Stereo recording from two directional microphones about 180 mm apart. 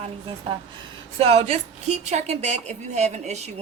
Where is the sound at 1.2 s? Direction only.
35° right (ahead or behind).